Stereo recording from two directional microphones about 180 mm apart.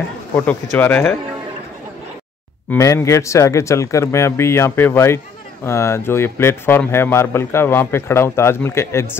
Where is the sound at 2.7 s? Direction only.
15° left (ahead or behind).